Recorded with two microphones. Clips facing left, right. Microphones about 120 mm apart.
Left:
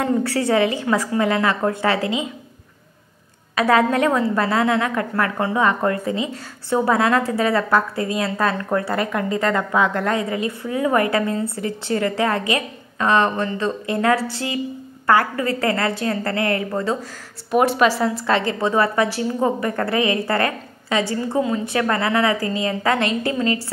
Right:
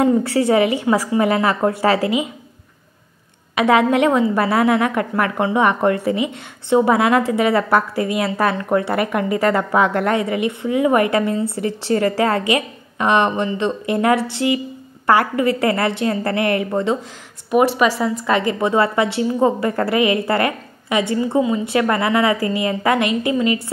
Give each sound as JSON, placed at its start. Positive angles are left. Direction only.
{"t": 0.0, "sound": "a woman's voice", "side_deg": -25}
{"t": 3.5, "sound": "a woman's voice", "side_deg": -20}
{"t": 17.5, "sound": "a woman's voice", "side_deg": -5}
{"t": 18.7, "sound": "a woman's voice", "side_deg": -25}